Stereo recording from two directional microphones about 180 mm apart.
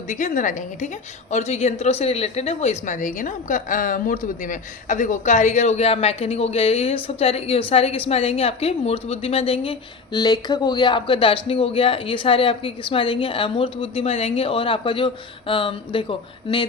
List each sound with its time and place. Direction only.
0.1 s a woman's voice: 45° left (ahead or behind); by 16.6 s 30° left (ahead or behind)